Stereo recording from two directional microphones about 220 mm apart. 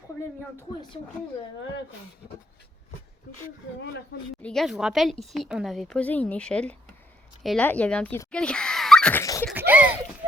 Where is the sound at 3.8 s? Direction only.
50° left (ahead or behind).